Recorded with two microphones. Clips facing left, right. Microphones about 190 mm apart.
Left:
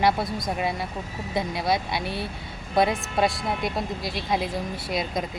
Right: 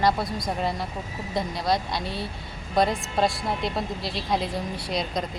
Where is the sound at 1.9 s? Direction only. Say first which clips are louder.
Left 1 dB; 60° left (ahead or behind).